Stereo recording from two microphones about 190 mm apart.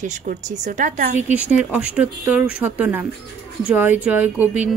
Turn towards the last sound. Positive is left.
turn(degrees=-10)  # may be behind; listen again after turning